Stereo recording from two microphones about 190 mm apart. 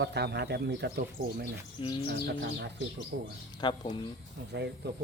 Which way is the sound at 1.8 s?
25° left (ahead or behind).